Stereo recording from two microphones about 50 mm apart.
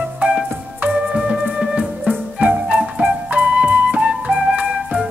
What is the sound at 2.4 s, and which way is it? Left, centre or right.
Flute, right.